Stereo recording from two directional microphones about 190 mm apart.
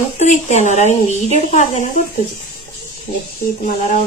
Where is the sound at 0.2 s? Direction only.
40° left (ahead or behind).